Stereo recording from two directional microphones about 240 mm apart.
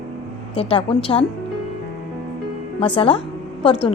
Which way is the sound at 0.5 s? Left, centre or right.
Left.